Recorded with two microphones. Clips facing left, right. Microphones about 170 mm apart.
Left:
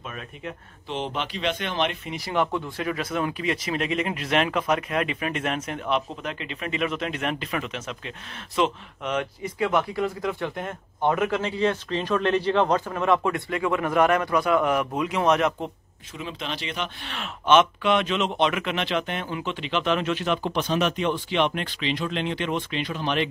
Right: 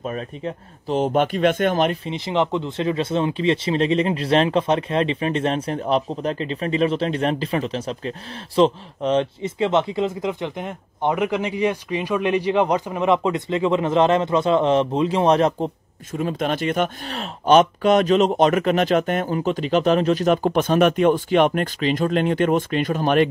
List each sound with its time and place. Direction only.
0.0 s speech: 35° right (ahead or behind)
2.0 s speech: 20° right (ahead or behind)
16.1 s speech: 45° right (ahead or behind)